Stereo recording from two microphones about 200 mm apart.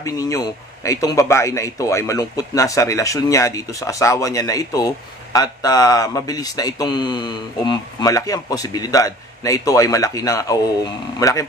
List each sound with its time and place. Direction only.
0.0 s speech: 15° left (ahead or behind)